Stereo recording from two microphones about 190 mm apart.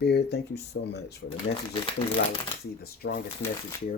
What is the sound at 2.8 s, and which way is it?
Speech, 55° left (ahead or behind).